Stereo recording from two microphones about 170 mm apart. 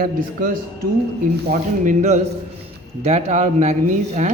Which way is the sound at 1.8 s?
45° right (ahead or behind).